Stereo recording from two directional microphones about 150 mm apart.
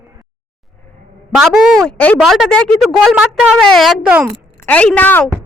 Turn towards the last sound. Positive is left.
turn(degrees=10)  # may be behind; listen again after turning